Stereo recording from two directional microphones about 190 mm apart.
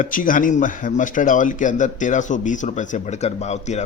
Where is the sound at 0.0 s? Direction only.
45° left (ahead or behind).